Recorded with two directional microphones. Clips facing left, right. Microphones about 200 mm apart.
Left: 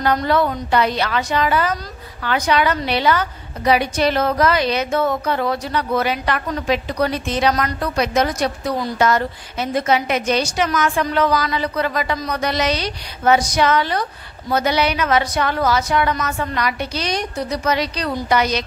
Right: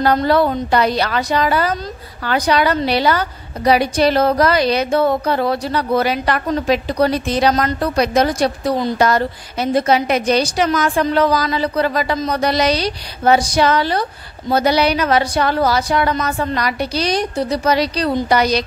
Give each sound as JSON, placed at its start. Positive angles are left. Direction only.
{"t": 0.0, "sound": "a woman's voice", "side_deg": -35}